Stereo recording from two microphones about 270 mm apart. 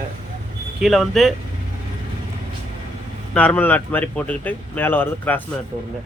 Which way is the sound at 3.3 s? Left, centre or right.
Centre.